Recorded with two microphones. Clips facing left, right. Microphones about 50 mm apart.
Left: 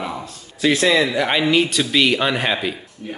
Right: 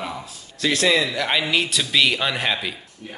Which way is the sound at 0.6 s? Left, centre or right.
Centre.